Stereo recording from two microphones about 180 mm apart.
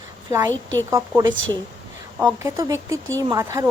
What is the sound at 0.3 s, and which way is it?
Speech, 15° right (ahead or behind).